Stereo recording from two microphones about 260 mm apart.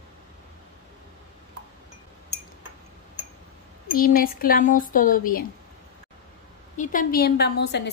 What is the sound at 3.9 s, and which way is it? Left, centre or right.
A woman's voice, left.